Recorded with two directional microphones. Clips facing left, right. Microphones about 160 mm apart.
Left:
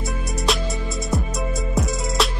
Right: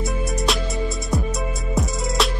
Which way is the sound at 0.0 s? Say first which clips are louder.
Right 2 dB; centre (ahead or behind).